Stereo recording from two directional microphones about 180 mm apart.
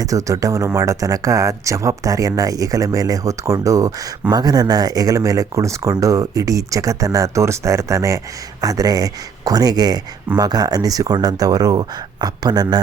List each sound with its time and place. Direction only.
0.0 s speech: 20° right (ahead or behind)